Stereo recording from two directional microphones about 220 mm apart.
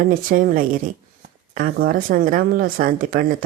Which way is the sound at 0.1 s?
40° right (ahead or behind).